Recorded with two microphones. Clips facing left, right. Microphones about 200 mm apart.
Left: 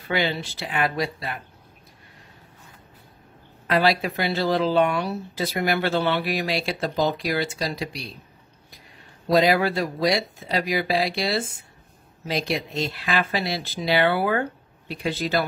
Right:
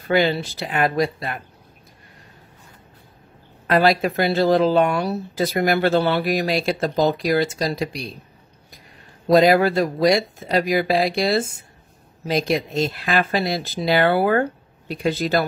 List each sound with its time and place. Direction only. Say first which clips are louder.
0.1 s speech: right 6 dB; 45° right (ahead or behind)
3.6 s speech: right 4 dB; 45° right (ahead or behind)
9.3 s speech: right 5 dB; 45° right (ahead or behind)